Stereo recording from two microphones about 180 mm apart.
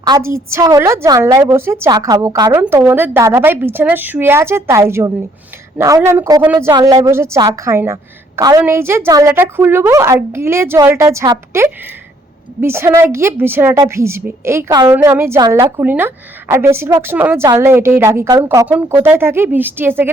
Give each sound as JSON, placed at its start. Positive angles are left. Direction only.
{"t": 0.0, "sound": "a woman's voice", "side_deg": -15}
{"t": 15.4, "sound": "a woman's voice", "side_deg": -25}
{"t": 15.8, "sound": "a woman's voice", "side_deg": -10}